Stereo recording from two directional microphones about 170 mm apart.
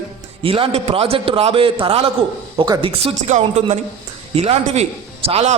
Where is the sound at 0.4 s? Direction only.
35° right (ahead or behind).